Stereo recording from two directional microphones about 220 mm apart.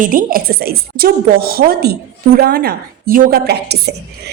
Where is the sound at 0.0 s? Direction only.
40° right (ahead or behind).